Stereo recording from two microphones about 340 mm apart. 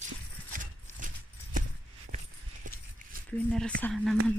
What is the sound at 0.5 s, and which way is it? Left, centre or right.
Horse, right.